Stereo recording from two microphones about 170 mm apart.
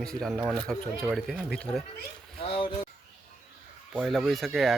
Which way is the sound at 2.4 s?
35° left (ahead or behind).